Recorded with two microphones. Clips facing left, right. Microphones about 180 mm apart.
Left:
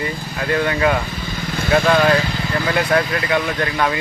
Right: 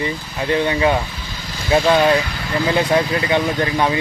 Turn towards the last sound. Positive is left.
turn(degrees=-25)  # may be behind; listen again after turning